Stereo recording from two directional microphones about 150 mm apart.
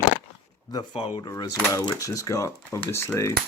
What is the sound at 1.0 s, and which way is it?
Cutlery, 30° left (ahead or behind).